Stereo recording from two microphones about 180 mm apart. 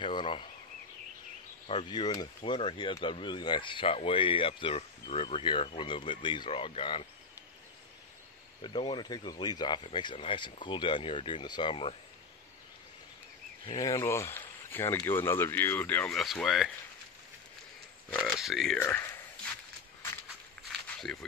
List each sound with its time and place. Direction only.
0.0 s a sound: 25° left (ahead or behind)
1.7 s speech: 25° left (ahead or behind)
8.6 s speech: 25° left (ahead or behind)
13.7 s speech: 20° left (ahead or behind); by 16.7 s centre (ahead or behind)
18.1 s speech: centre (ahead or behind)
18.8 s speech: 15° left (ahead or behind)
21.0 s speech: 5° left (ahead or behind)